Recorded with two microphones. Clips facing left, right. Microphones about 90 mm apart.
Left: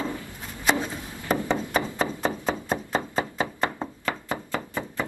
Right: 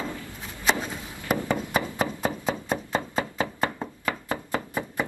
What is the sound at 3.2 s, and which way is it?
Knock, 25° left (ahead or behind).